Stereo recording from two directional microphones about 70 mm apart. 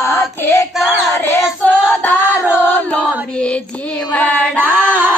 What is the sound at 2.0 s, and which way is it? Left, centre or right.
Child singing, left.